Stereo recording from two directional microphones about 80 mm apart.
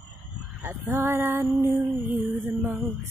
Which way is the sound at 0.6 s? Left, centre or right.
Right.